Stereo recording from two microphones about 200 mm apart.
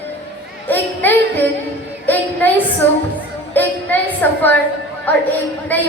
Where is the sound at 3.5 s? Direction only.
10° left (ahead or behind).